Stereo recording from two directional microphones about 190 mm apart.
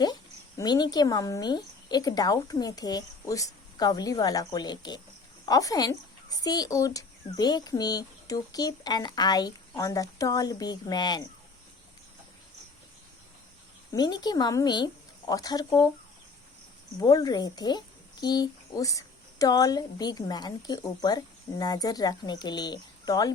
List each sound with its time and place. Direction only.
0.0 s a woman's voice: 20° left (ahead or behind)
13.9 s a woman's voice: 20° left (ahead or behind)
17.0 s a woman's voice: 20° left (ahead or behind)